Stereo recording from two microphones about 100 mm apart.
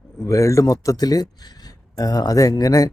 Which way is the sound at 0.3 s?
30° left (ahead or behind).